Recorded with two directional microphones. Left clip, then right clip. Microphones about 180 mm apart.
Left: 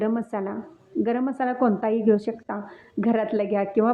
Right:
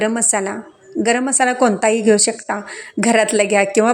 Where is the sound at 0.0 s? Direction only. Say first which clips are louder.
Right 8 dB; 15° right (ahead or behind).